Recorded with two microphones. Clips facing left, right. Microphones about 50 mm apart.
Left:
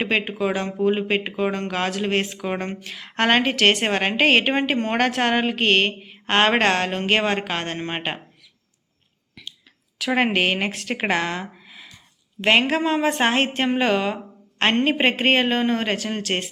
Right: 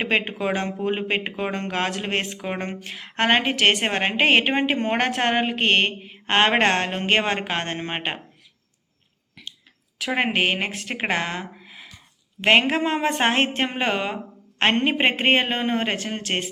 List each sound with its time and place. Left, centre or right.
0.0 s speech: right
0.3 s speech: right
3.2 s a woman's voice: centre
10.1 s a woman's voice: centre
10.7 s speech: right
11.0 s speech: centre; by 13.1 s right
13.1 s a woman's voice: centre
16.3 s speech: centre